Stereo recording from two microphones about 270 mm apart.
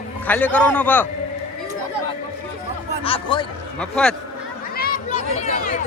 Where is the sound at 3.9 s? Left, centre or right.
Centre.